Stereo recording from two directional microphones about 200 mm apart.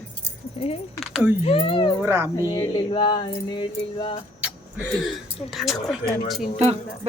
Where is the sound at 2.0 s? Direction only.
10° right (ahead or behind).